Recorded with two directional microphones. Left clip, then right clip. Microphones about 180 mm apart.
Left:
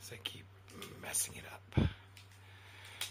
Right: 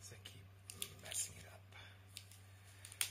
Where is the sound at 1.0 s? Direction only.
50° left (ahead or behind).